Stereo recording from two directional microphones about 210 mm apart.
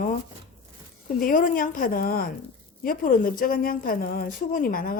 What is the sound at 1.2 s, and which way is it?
A woman's voice, 40° left (ahead or behind).